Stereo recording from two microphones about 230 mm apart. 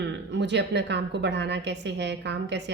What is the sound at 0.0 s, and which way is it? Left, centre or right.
A woman's voice, right.